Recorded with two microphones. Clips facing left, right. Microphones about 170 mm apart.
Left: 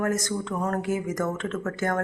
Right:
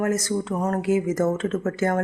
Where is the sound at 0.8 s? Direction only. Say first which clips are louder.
Right 6 dB; 10° right (ahead or behind).